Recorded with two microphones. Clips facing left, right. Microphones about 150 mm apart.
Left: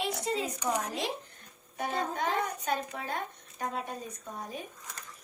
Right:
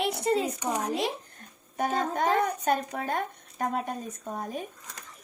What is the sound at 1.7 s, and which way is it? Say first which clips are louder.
Speech: right 5 dB; 45° right (ahead or behind).